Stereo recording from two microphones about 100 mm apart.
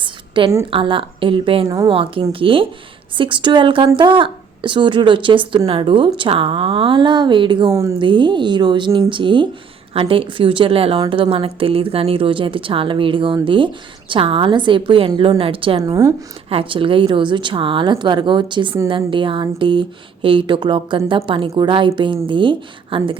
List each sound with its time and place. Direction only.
0.0 s a sound: 55° right (ahead or behind)
0.7 s a woman's voice: 60° right (ahead or behind)
1.6 s a woman's voice: 35° right (ahead or behind)
1.9 s a woman's voice: 65° right (ahead or behind)
7.7 s a woman's voice: 30° right (ahead or behind)
7.9 s a woman's voice: 55° right (ahead or behind)